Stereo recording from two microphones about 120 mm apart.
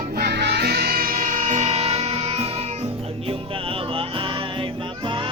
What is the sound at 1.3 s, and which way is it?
Music, 90° right.